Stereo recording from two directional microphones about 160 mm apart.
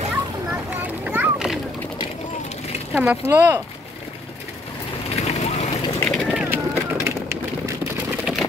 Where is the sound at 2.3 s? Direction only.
45° left (ahead or behind).